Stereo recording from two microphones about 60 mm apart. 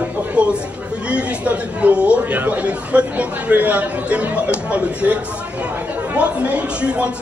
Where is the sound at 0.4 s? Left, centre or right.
Centre.